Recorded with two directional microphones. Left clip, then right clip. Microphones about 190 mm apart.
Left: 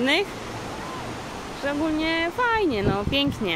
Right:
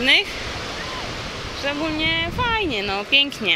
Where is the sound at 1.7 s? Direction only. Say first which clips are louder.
Right 2 dB; 20° left (ahead or behind).